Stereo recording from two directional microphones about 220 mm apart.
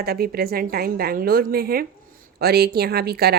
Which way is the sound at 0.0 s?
45° right (ahead or behind).